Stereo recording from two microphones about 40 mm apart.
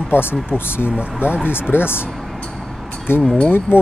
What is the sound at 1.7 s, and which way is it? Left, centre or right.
Speech, left.